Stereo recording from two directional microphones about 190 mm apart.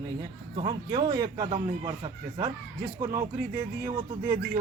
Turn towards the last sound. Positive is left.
turn(degrees=-20)  # may be behind; listen again after turning